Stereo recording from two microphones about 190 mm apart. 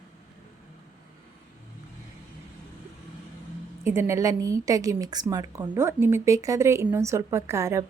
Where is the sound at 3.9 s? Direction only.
15° right (ahead or behind).